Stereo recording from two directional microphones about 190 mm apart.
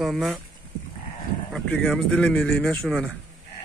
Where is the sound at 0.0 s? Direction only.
Centre (ahead or behind).